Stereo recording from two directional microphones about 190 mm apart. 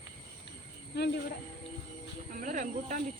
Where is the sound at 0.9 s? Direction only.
60° left (ahead or behind).